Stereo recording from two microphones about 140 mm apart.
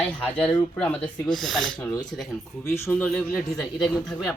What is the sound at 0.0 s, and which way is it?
Speech, 10° left (ahead or behind).